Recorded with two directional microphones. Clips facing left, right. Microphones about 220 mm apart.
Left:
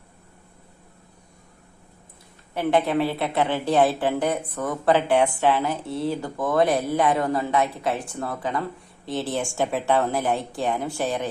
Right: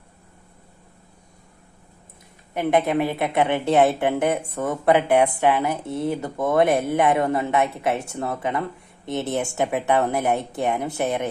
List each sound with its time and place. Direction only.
2.6 s a woman's voice: 20° right (ahead or behind)